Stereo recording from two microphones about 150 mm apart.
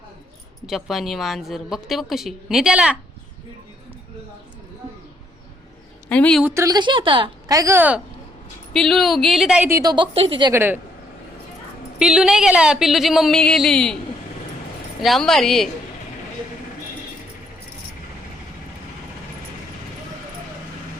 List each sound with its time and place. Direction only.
0.7 s a woman's voice: centre (ahead or behind)
6.1 s a woman's voice: 5° left (ahead or behind)
6.4 s a woman's voice: 20° right (ahead or behind)
8.7 s a woman's voice: centre (ahead or behind)
9.6 s a woman's voice: 20° right (ahead or behind)
9.9 s a woman's voice: 35° right (ahead or behind)
10.5 s speech: 15° right (ahead or behind)
11.9 s a woman's voice: 5° right (ahead or behind)
15.0 s a woman's voice: centre (ahead or behind)